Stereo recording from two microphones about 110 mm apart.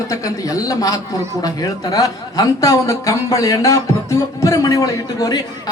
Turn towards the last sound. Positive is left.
turn(degrees=35)  # may be behind; listen again after turning